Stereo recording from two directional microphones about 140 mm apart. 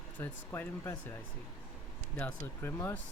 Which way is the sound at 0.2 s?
15° left (ahead or behind).